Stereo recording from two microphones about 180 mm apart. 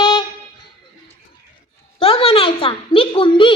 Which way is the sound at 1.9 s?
30° left (ahead or behind).